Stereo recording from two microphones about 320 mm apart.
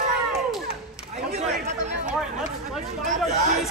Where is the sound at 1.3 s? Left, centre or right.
Right.